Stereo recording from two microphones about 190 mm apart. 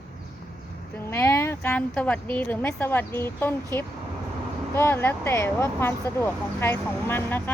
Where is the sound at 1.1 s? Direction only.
15° left (ahead or behind).